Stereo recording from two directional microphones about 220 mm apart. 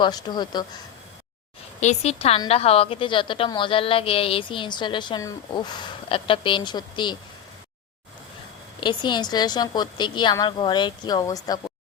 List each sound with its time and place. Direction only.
0.0 s a woman's voice: 20° left (ahead or behind)
1.8 s a woman's voice: 30° left (ahead or behind)
8.8 s a woman's voice: 20° left (ahead or behind)